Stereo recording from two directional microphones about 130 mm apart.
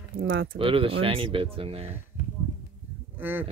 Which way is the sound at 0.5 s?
45° right (ahead or behind).